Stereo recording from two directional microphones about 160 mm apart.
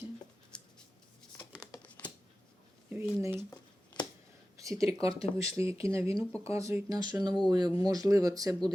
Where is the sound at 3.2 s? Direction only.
15° right (ahead or behind).